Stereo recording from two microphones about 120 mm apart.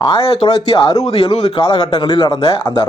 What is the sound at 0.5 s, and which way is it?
Speech, 30° left (ahead or behind).